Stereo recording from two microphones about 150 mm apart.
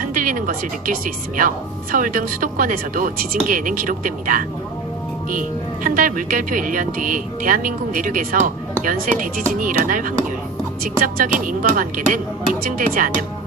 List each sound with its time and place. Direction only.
0.0 s speech: 65° right (ahead or behind)